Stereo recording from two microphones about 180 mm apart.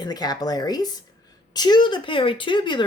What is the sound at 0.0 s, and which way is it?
Speech, 20° left (ahead or behind).